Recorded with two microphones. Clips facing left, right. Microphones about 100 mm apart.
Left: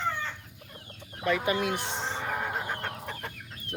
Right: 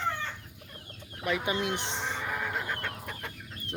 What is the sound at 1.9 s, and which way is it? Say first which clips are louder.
Vehicle: left 2 dB; 20° left (ahead or behind).